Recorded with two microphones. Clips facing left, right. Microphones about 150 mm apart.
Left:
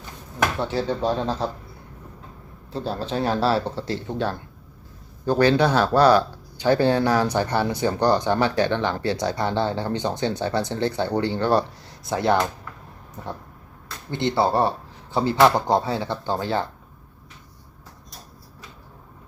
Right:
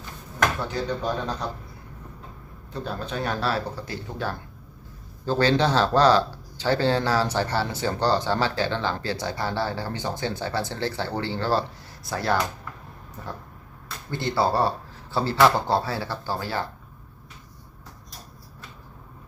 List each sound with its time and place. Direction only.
0.6 s speech: 30° left (ahead or behind)
2.7 s speech: 30° left (ahead or behind)